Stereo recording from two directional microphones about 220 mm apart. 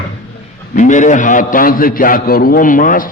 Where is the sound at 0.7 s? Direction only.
35° left (ahead or behind).